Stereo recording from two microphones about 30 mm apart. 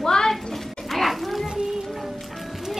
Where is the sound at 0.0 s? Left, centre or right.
Centre.